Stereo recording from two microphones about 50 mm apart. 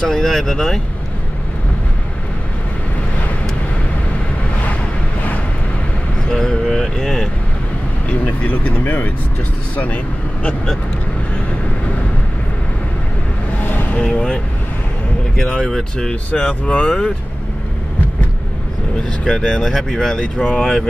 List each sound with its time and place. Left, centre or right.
0.0 s speech: centre
6.3 s speech: centre
8.1 s speech: left
13.7 s a sound: left
14.0 s speech: centre
15.4 s speech: centre
19.2 s speech: centre